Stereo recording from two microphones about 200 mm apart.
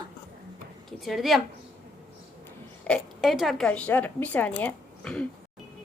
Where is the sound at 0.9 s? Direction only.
Centre (ahead or behind).